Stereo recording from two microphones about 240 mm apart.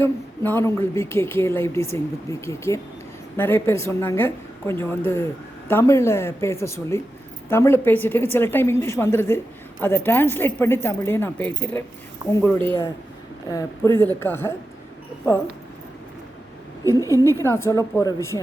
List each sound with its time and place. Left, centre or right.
0.0 s a woman's voice: centre
17.1 s a woman's voice: centre